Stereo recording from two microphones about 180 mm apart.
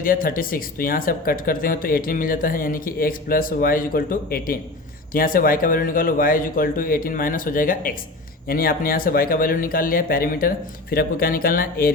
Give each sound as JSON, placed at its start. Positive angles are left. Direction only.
{"t": 0.0, "sound": "speech", "side_deg": 50}